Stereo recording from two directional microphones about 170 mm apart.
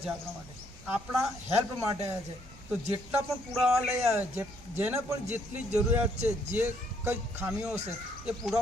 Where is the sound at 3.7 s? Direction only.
10° right (ahead or behind).